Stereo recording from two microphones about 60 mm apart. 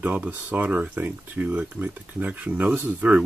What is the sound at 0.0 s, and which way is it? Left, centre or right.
Speech, right.